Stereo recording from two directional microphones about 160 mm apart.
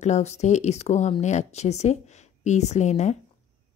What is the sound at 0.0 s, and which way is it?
A woman's voice, 45° left (ahead or behind).